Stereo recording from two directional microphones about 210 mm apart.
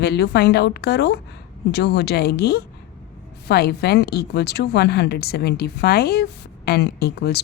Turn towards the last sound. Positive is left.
turn(degrees=50)  # may be behind; listen again after turning